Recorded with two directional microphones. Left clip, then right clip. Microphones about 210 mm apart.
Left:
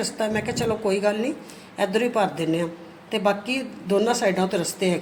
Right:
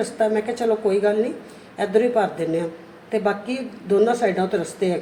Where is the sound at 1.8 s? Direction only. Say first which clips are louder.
Right 3 dB; 50° left (ahead or behind).